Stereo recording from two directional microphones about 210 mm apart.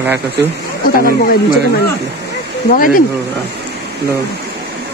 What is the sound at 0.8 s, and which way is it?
Speech, 45° left (ahead or behind).